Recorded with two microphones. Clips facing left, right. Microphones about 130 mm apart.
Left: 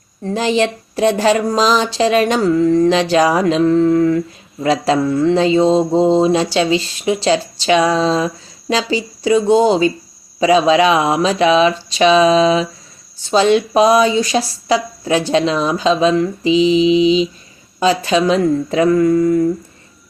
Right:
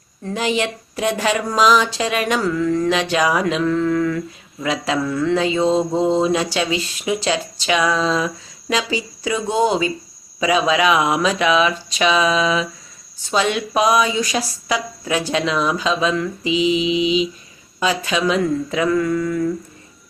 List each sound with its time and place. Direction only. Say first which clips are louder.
0.2 s speech: left 5 dB; 35° left (ahead or behind)